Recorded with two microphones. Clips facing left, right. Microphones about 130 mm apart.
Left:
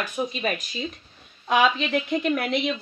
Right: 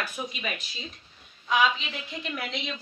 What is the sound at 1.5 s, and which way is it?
A woman's voice, 60° left (ahead or behind).